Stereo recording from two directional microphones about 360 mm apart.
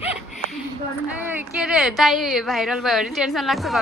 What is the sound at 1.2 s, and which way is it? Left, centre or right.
Speech, centre.